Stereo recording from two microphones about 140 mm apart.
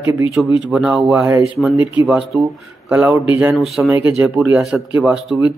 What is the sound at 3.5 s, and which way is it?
Speech, centre (ahead or behind).